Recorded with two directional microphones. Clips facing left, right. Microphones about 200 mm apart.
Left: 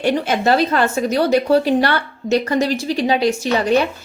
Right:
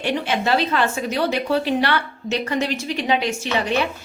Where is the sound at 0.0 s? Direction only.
45° left (ahead or behind).